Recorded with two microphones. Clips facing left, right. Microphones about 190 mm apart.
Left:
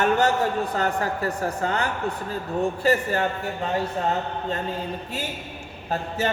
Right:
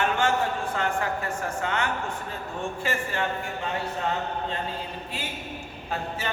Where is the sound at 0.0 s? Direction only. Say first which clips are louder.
Left 4 dB; 40° left (ahead or behind).